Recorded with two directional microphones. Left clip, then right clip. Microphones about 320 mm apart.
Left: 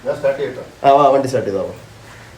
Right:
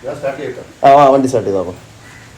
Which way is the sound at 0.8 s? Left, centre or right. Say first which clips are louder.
Right 4 dB; centre.